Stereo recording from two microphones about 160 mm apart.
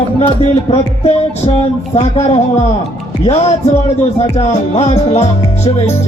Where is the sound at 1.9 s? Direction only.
40° left (ahead or behind).